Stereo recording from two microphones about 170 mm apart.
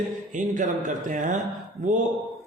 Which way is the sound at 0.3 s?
50° right (ahead or behind).